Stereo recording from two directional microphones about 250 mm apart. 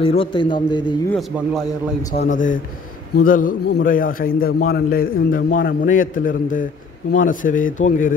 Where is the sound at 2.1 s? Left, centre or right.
Left.